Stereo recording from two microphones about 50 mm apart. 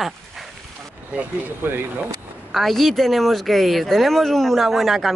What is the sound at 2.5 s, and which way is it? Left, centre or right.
Speech, centre.